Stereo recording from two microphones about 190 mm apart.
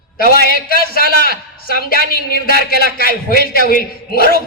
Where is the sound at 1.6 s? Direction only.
50° left (ahead or behind).